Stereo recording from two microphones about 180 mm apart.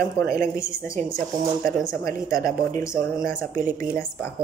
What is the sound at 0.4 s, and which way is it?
Speech, 15° left (ahead or behind).